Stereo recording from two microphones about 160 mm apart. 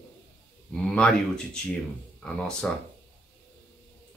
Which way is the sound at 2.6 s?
5° left (ahead or behind).